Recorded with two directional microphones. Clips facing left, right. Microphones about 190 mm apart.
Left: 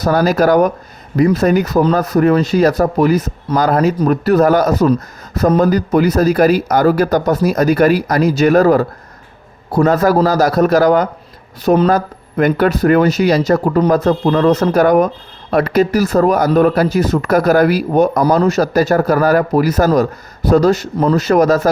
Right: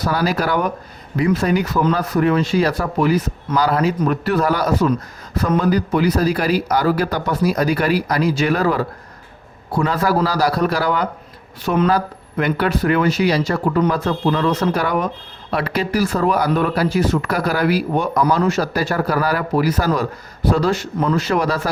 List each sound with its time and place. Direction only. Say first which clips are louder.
0.0 s speech: left 7 dB; 45° left (ahead or behind)